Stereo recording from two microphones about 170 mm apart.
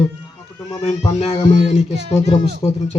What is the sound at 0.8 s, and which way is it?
Speech, 40° left (ahead or behind).